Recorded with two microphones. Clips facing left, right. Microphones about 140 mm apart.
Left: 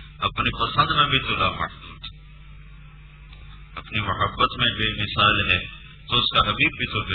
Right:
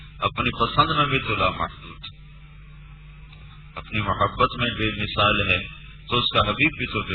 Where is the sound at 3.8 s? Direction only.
30° right (ahead or behind).